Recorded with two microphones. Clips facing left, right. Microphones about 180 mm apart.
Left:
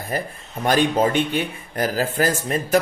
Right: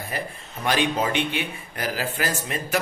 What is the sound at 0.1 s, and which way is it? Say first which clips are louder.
A man's voice: left 7 dB; 45° left (ahead or behind).